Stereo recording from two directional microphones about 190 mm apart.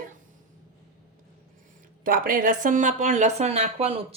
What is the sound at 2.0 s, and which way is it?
Speech, 50° right (ahead or behind).